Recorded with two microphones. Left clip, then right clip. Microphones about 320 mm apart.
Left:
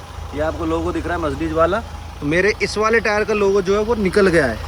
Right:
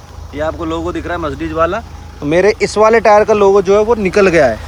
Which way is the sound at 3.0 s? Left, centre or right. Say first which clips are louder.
Right 10 dB; right.